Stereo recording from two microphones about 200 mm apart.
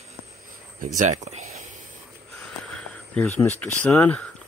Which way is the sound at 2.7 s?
5° left (ahead or behind).